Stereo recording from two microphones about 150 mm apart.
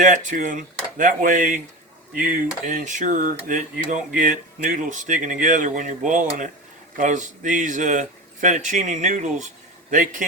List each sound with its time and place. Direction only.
0.0 s speech: 60° right (ahead or behind)